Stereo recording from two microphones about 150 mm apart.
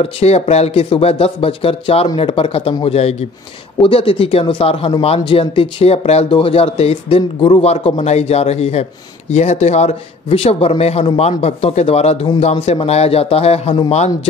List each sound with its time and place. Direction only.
0.0 s speech: 45° left (ahead or behind)